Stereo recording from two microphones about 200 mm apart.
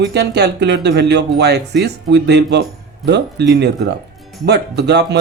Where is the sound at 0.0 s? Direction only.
55° right (ahead or behind).